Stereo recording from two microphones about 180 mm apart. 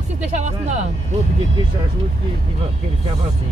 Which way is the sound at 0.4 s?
40° right (ahead or behind).